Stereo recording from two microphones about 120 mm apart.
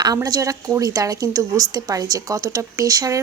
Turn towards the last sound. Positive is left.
turn(degrees=-30)  # may be behind; listen again after turning